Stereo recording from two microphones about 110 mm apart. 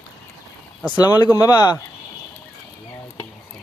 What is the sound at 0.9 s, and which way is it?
Speech, 40° left (ahead or behind).